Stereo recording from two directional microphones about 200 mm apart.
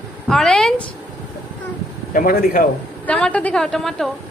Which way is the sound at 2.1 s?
45° left (ahead or behind).